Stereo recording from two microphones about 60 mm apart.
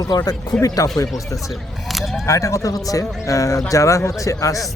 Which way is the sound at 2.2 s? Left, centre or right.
Left.